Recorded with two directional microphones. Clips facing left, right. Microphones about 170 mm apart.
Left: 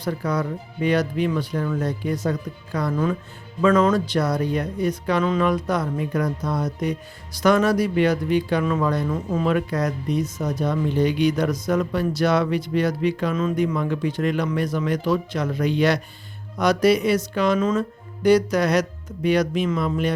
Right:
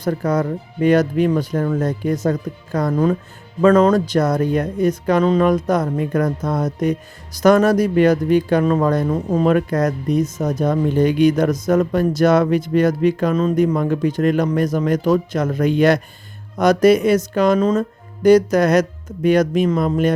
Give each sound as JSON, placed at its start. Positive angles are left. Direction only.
{"t": 0.0, "sound": "speech", "side_deg": -45}